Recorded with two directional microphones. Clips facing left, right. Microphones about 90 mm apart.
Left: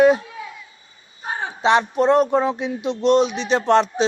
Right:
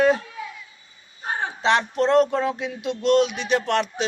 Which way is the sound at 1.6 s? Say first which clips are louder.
Left 4 dB; 15° left (ahead or behind).